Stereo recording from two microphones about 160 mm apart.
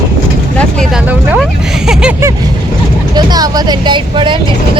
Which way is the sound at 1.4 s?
5° right (ahead or behind).